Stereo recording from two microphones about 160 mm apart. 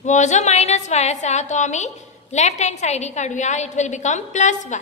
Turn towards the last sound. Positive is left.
turn(degrees=50)  # may be behind; listen again after turning